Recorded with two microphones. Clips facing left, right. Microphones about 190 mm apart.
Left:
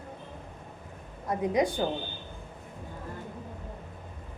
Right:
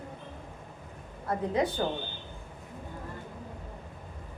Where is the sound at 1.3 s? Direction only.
15° left (ahead or behind).